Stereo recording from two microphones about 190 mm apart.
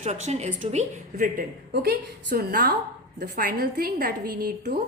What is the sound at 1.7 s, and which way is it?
A woman's voice, 60° right (ahead or behind).